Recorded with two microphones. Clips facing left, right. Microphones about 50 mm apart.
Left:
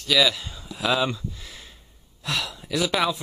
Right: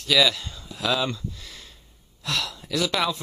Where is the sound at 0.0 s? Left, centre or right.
Centre.